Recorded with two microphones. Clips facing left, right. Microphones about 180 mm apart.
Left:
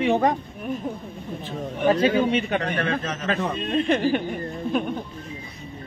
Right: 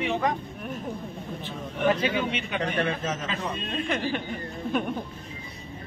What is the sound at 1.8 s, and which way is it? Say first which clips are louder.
Speech: left 6 dB; 45° left (ahead or behind).